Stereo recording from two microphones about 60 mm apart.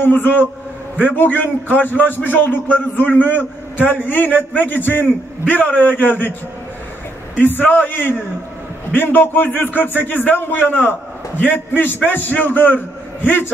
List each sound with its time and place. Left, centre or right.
0.0 s a man's voice: left
7.6 s a man's voice: left